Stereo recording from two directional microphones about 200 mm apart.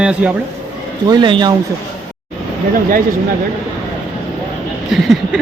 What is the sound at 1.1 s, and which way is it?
Speech, 25° right (ahead or behind).